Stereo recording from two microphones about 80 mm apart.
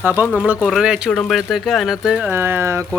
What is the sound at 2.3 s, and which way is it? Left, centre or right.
Speech, right.